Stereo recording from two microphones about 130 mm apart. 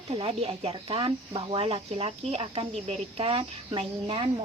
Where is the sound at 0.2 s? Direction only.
45° right (ahead or behind).